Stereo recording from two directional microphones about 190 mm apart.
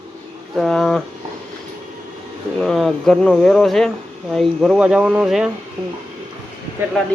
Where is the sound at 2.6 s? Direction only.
Centre (ahead or behind).